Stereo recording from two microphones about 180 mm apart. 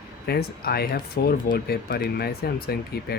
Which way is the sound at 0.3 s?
60° left (ahead or behind).